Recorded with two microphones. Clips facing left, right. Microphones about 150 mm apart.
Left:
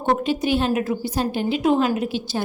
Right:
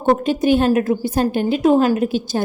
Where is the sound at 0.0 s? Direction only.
45° right (ahead or behind).